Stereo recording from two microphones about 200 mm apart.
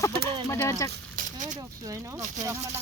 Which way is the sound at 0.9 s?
40° right (ahead or behind).